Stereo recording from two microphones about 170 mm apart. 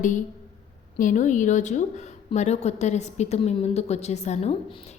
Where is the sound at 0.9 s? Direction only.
50° left (ahead or behind).